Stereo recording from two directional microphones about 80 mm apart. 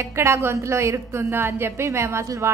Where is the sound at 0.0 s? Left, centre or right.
Right.